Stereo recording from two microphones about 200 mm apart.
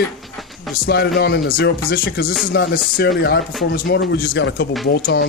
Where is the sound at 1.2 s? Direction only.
50° left (ahead or behind).